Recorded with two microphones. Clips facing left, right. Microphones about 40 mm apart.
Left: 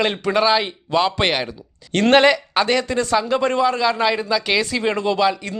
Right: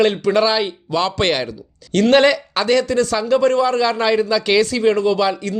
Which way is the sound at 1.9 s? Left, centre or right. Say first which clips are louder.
Right 1 dB; left.